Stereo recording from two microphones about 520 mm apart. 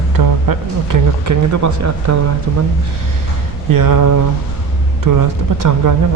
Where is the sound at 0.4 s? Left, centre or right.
Right.